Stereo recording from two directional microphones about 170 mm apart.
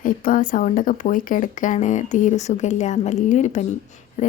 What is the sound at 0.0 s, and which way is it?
Speech, 50° left (ahead or behind).